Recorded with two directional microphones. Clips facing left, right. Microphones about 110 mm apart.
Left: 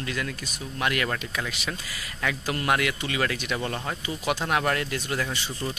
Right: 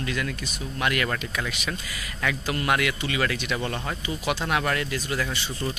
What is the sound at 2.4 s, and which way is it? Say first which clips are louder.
Speech: even; 35° left (ahead or behind).